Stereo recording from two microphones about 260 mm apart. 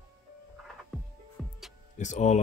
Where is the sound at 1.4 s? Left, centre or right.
Centre.